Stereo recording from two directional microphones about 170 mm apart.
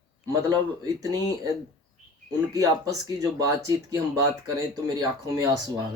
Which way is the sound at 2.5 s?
20° right (ahead or behind).